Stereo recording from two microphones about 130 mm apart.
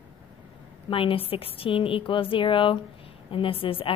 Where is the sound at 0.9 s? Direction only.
45° left (ahead or behind).